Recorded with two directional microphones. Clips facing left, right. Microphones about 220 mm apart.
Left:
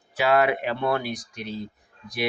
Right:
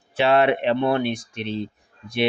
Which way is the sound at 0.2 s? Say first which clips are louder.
Right 3 dB; 25° right (ahead or behind).